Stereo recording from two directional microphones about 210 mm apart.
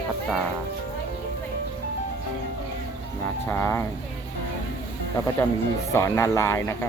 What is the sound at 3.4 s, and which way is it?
Speech, 10° left (ahead or behind).